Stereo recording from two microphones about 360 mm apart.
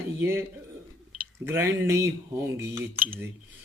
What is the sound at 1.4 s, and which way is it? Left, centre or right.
Speech, centre.